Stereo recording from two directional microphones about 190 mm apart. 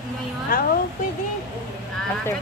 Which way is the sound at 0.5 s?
50° left (ahead or behind).